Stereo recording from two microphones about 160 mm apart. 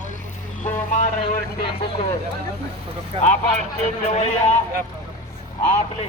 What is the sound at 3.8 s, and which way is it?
Speech, 45° left (ahead or behind).